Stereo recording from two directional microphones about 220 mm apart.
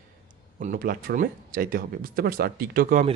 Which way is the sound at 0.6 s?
40° right (ahead or behind).